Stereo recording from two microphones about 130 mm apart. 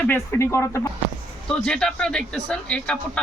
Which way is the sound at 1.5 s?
5° left (ahead or behind).